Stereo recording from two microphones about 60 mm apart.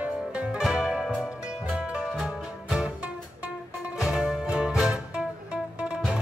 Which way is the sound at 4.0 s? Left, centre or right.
Centre.